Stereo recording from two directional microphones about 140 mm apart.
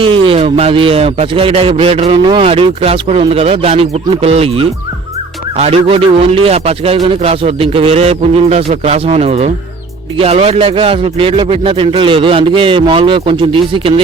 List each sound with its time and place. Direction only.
0.0 s a man's voice: 40° right (ahead or behind)
2.5 s a man's voice: 45° right (ahead or behind)